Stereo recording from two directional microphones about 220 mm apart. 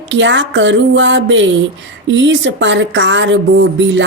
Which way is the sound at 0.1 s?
55° right (ahead or behind).